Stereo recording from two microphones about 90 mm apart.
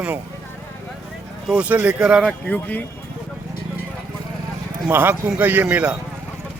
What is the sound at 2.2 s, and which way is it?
Speech, 10° left (ahead or behind).